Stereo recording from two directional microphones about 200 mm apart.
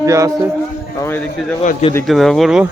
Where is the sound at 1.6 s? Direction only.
35° left (ahead or behind).